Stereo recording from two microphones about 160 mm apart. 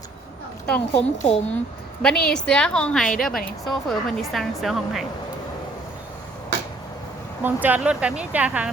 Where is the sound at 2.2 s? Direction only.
5° left (ahead or behind).